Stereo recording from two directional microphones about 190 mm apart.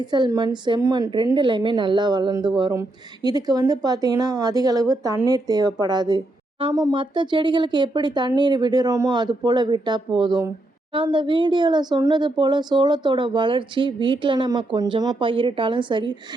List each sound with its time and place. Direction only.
0.1 s speech: 20° right (ahead or behind)